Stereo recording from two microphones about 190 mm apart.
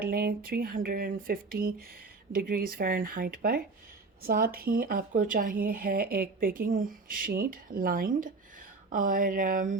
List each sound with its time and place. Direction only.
0.0 s speech: 50° right (ahead or behind)